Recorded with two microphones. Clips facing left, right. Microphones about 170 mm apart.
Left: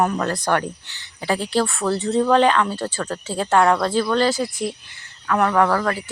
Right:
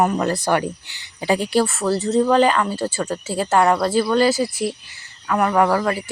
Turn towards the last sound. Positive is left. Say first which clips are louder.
# right 1 dB
turn(degrees=-15)  # may be behind; listen again after turning